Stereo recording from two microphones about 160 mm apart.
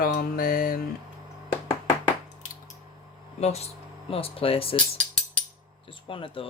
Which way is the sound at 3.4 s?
40° left (ahead or behind).